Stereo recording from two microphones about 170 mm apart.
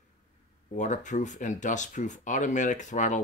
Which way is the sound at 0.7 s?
45° left (ahead or behind).